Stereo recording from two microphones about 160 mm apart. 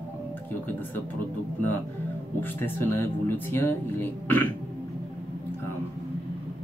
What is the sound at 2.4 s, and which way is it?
Speech, 15° left (ahead or behind).